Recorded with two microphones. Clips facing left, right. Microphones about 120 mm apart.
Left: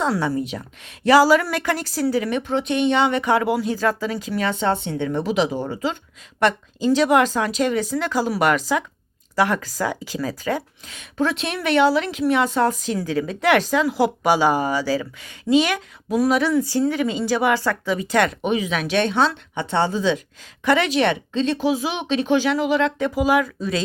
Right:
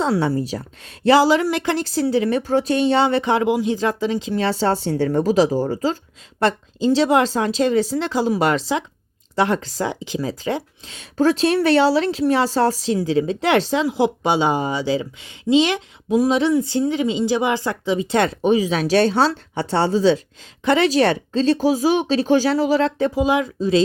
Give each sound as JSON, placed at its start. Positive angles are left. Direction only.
{"t": 0.0, "sound": "speech", "side_deg": -30}
{"t": 6.4, "sound": "speech", "side_deg": -30}